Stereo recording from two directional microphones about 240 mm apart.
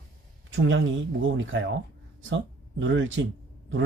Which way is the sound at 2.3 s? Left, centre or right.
Right.